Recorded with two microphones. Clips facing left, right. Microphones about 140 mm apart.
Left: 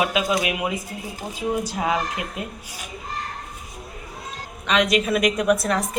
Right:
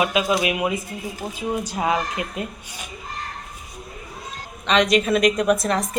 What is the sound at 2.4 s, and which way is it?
Speech, 5° left (ahead or behind).